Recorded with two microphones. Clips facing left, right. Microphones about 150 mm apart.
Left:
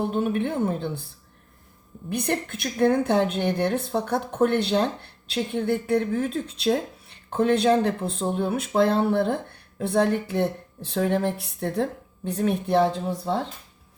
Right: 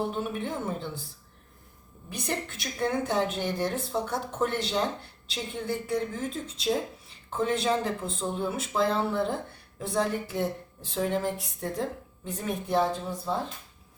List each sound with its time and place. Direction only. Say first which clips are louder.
0.2 s speech: left 8 dB; 60° left (ahead or behind)
2.0 s speech: left 7 dB; 60° left (ahead or behind)